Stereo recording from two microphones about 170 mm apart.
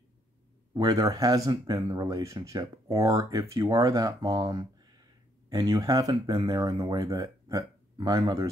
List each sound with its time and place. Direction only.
0.7 s speech: 20° right (ahead or behind)